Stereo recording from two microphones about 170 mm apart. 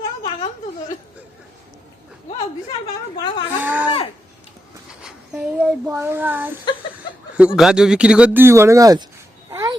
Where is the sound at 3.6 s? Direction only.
10° right (ahead or behind).